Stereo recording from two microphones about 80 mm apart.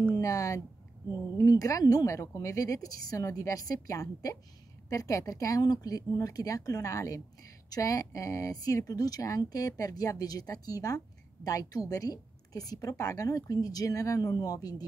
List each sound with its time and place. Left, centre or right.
0.2 s speech: left